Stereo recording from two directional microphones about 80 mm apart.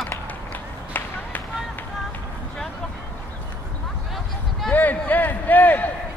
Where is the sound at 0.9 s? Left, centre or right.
Left.